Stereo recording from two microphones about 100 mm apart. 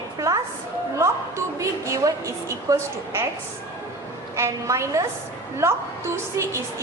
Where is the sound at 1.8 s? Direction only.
30° right (ahead or behind).